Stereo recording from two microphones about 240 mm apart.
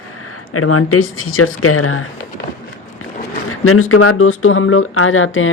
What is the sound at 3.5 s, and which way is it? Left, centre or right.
Speech, left.